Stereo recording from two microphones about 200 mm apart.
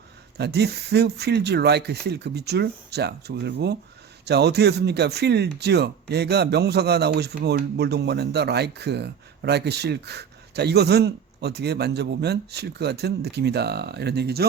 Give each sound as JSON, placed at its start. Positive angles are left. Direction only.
{"t": 0.3, "sound": "speech", "side_deg": -55}